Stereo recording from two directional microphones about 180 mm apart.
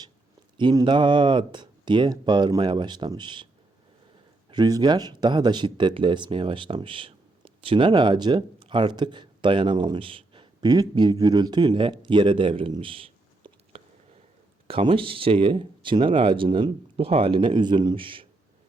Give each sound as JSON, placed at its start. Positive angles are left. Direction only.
{"t": 0.5, "sound": "speech", "side_deg": -25}
{"t": 4.5, "sound": "speech", "side_deg": -25}